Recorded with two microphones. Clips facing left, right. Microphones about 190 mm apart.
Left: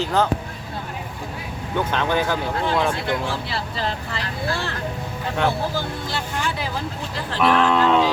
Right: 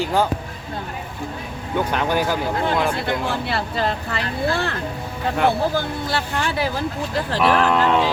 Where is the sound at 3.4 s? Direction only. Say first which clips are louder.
Right 4 dB; 60° right (ahead or behind).